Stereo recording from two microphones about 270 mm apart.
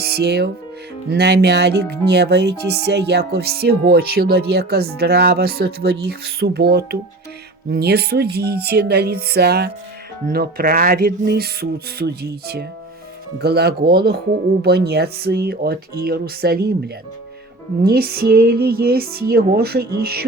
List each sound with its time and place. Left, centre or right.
0.0 s speech: right